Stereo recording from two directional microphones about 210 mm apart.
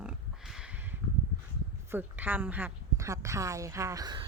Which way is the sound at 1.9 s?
10° right (ahead or behind).